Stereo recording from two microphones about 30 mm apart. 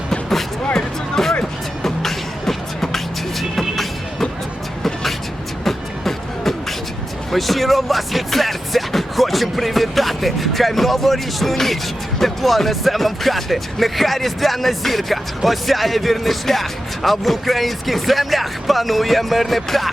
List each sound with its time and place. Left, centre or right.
1.1 s music: centre
5.6 s beatboxing: centre
7.3 s speech: centre